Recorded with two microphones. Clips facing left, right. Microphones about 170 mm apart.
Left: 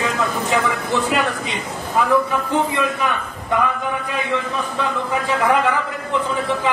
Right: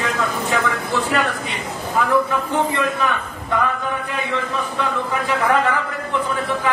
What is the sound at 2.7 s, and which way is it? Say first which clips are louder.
Speech: even; 15° left (ahead or behind).